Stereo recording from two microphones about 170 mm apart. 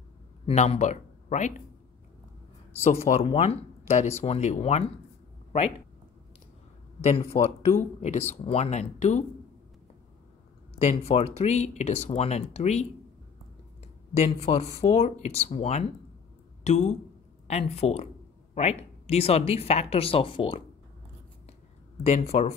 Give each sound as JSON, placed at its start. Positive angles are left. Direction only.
{"t": 0.5, "sound": "speech", "side_deg": 40}
{"t": 2.8, "sound": "speech", "side_deg": 40}
{"t": 7.0, "sound": "speech", "side_deg": 35}
{"t": 10.8, "sound": "speech", "side_deg": 35}
{"t": 14.1, "sound": "speech", "side_deg": 40}
{"t": 22.0, "sound": "speech", "side_deg": 40}